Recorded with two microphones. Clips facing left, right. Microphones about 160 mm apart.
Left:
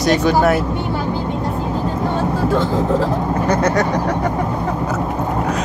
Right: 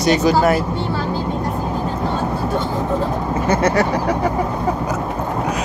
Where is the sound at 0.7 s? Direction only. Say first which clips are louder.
Left 1 dB; 15° left (ahead or behind).